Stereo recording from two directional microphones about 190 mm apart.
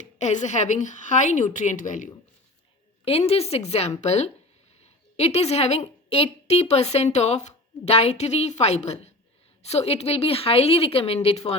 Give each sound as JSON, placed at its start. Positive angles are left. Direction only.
{"t": 0.0, "sound": "a woman's voice", "side_deg": 40}
{"t": 3.0, "sound": "a woman's voice", "side_deg": 30}